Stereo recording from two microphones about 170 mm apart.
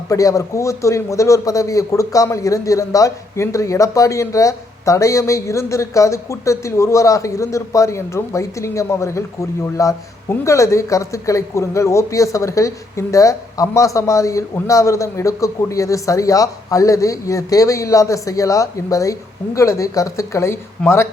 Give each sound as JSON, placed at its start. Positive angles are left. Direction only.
{"t": 0.1, "sound": "a man's voice", "side_deg": 20}